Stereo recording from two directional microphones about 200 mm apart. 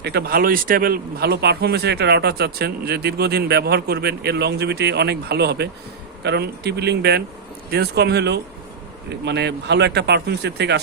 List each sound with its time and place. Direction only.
0.0 s speech: 55° right (ahead or behind)